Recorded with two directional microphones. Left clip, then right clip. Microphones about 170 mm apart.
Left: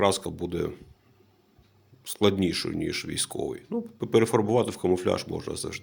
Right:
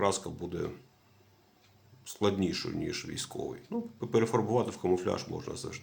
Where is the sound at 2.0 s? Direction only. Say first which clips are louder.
Left 6 dB; 30° left (ahead or behind).